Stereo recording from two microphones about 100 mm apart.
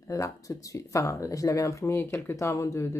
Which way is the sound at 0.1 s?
35° left (ahead or behind).